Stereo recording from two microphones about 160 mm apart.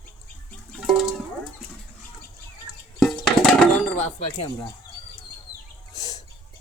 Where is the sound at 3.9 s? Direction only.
40° left (ahead or behind).